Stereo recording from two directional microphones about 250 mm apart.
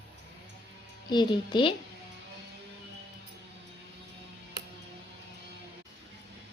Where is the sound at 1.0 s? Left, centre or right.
Centre.